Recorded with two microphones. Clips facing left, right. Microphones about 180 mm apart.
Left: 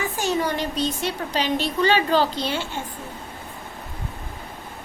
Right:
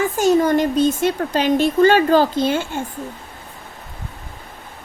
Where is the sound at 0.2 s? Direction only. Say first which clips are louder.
Right 9 dB; 45° right (ahead or behind).